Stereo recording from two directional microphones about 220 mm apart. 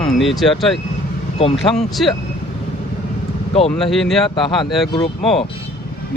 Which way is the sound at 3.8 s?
Centre (ahead or behind).